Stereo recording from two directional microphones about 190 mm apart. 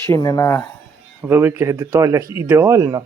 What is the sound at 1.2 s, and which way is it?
Speech, 10° right (ahead or behind).